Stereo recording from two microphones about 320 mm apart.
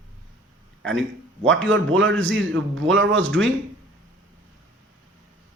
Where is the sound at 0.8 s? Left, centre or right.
Right.